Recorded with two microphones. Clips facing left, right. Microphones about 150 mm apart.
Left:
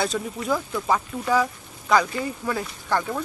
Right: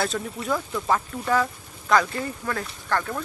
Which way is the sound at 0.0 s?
Centre (ahead or behind).